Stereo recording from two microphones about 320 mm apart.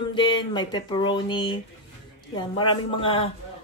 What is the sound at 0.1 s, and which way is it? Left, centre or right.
Speech, centre.